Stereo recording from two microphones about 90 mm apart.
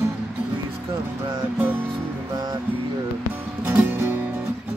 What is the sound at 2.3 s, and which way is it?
Music, 50° right (ahead or behind).